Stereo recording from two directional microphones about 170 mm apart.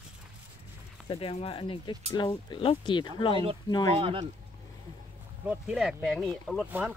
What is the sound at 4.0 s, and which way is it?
Speech, 30° right (ahead or behind).